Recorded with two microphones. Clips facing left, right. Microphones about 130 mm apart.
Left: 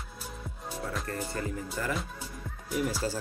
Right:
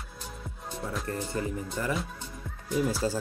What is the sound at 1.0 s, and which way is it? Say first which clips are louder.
Speech: right 2 dB; 20° right (ahead or behind).